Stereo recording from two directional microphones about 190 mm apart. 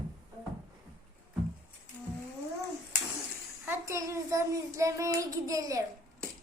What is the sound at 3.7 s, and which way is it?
A child's voice, 15° right (ahead or behind).